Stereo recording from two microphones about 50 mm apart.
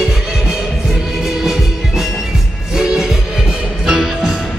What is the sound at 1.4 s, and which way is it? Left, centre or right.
Music, centre.